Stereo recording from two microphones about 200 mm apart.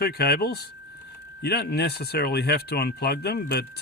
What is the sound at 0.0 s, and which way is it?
Speech, 50° left (ahead or behind).